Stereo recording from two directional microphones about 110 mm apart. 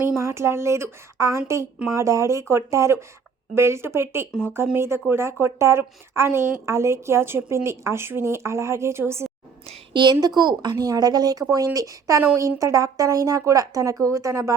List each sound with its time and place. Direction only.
0.2 s a woman's voice: 25° right (ahead or behind)
9.9 s speech: 40° right (ahead or behind)